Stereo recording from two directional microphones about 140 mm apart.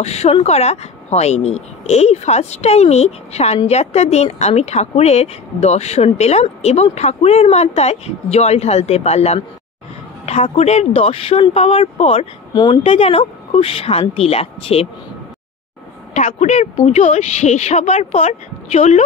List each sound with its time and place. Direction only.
0.0 s speech: 50° left (ahead or behind)
10.2 s a sound: 50° left (ahead or behind)
10.5 s speech: 50° left (ahead or behind)
16.1 s speech: 55° left (ahead or behind)